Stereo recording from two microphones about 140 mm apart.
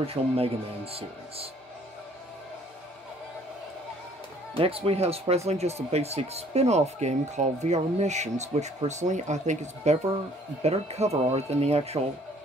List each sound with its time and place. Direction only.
0.0 s speech: 45° right (ahead or behind)
4.6 s speech: 45° right (ahead or behind)